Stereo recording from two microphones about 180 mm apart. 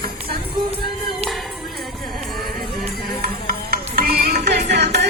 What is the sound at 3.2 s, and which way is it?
Music, 55° right (ahead or behind).